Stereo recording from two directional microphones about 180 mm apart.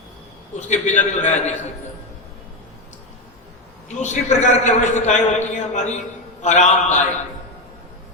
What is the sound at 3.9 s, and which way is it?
A man's voice, 40° left (ahead or behind).